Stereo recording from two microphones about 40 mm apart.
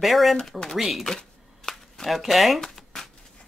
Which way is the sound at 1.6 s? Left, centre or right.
Centre.